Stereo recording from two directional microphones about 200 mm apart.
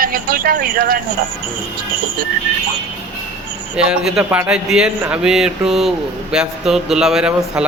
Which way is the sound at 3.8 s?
5° right (ahead or behind).